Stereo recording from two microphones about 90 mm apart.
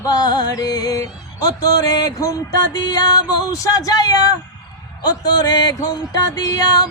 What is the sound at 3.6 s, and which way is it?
Music, 40° left (ahead or behind).